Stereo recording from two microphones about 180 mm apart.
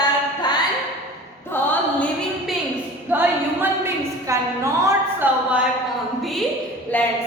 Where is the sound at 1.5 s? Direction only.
10° left (ahead or behind).